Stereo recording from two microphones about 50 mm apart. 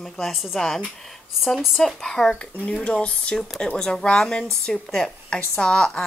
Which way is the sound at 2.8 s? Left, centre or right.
Left.